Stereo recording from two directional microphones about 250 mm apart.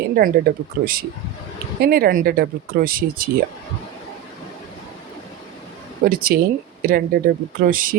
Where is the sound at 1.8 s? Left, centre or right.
Right.